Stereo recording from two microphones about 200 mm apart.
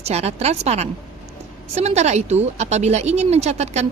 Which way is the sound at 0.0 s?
30° right (ahead or behind).